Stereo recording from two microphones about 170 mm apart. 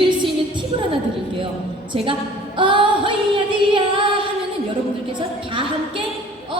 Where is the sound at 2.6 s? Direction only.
30° right (ahead or behind).